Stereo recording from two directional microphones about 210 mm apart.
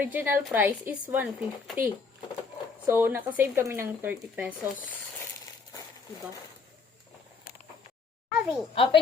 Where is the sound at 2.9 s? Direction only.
10° right (ahead or behind).